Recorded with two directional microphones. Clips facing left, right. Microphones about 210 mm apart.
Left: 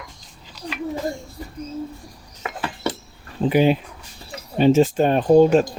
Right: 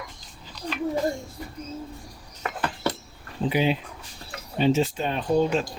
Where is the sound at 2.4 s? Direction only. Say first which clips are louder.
Left 1 dB; 5° left (ahead or behind).